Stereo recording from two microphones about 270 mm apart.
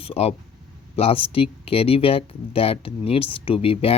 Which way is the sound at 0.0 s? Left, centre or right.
Left.